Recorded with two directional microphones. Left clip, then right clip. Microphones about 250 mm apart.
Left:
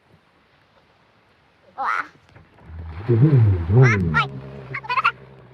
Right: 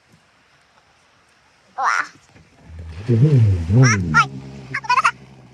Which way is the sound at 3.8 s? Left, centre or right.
Centre.